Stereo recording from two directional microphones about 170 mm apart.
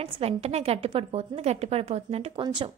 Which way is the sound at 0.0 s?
35° right (ahead or behind).